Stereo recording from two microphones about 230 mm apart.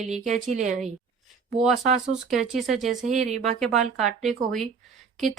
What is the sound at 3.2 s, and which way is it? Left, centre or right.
Speech, right.